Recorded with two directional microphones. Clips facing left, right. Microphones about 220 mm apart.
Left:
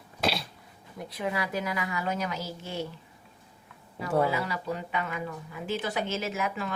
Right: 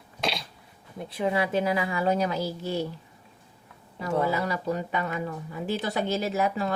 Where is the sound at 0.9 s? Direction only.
25° right (ahead or behind).